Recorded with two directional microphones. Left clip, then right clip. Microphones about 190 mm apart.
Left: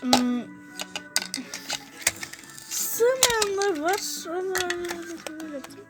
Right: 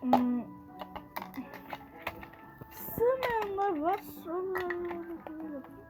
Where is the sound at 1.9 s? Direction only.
65° left (ahead or behind).